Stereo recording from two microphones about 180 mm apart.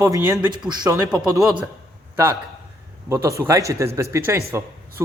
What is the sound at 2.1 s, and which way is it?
A man's voice, 15° right (ahead or behind).